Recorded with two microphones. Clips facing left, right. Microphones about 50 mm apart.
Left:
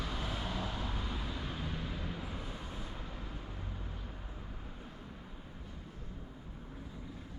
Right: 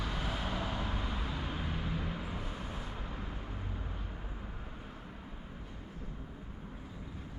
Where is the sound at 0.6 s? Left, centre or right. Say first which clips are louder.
Right 2 dB; centre.